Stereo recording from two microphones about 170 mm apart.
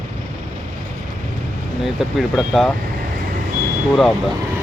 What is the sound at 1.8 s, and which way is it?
Speech, centre (ahead or behind).